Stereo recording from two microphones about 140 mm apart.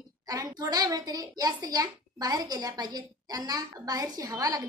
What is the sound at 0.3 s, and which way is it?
A child's voice, 25° right (ahead or behind).